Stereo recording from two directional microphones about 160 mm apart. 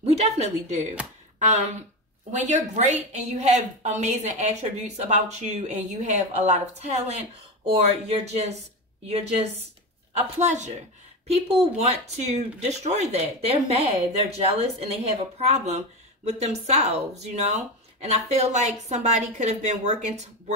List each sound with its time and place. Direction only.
0.0 s speech: 45° right (ahead or behind)